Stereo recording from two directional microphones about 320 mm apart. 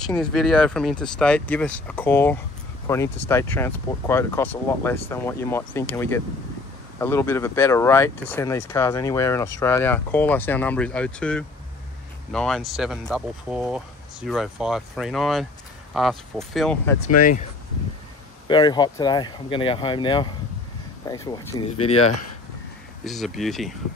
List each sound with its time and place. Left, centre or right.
0.3 s speech: centre
17.2 s speech: left
18.5 s speech: centre
23.0 s speech: centre